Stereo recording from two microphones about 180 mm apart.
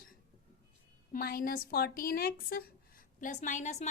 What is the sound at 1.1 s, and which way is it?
A woman's voice, 55° left (ahead or behind).